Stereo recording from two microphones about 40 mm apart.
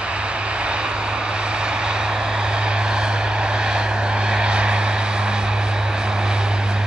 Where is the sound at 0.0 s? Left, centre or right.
Right.